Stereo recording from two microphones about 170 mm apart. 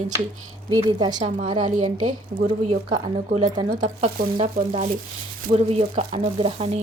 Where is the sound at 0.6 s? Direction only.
25° right (ahead or behind).